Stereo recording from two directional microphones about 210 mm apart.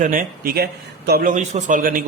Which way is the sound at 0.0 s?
40° right (ahead or behind).